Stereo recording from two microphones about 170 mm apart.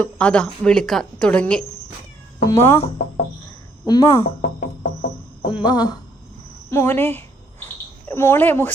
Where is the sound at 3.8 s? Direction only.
20° left (ahead or behind).